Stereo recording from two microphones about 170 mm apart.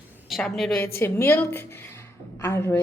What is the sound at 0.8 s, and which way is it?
A woman's voice, 15° left (ahead or behind).